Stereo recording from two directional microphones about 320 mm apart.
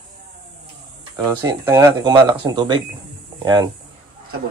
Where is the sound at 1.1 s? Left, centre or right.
Centre.